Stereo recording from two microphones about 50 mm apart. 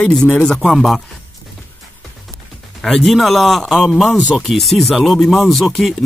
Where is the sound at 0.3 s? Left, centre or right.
Centre.